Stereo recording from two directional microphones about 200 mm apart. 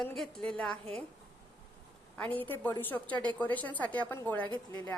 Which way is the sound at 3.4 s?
10° left (ahead or behind).